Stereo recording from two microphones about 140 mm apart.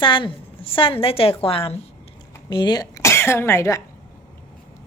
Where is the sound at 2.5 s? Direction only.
30° left (ahead or behind).